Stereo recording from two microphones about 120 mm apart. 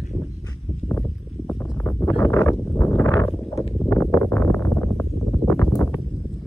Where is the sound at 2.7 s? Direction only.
10° left (ahead or behind).